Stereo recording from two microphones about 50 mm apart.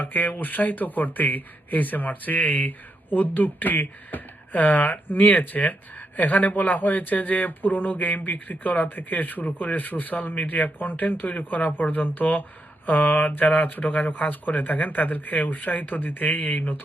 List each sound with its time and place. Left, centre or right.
0.0 s speech: left